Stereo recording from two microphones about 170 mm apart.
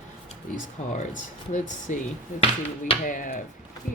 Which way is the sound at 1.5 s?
50° left (ahead or behind).